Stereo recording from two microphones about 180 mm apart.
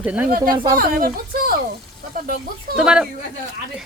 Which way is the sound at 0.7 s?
55° right (ahead or behind).